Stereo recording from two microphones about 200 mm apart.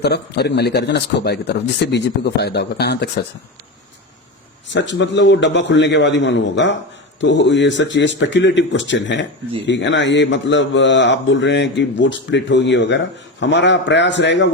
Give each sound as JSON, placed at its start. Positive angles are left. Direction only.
{"t": 0.0, "sound": "a man's voice", "side_deg": 55}
{"t": 4.7, "sound": "a man's voice", "side_deg": 65}